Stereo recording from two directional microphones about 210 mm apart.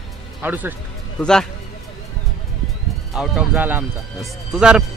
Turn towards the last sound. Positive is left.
turn(degrees=-5)  # may be behind; listen again after turning